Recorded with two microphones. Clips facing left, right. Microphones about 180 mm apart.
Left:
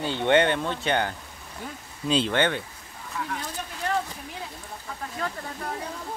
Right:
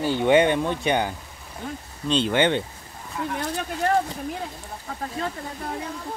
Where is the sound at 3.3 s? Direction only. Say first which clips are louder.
Right 7 dB; 65° right (ahead or behind).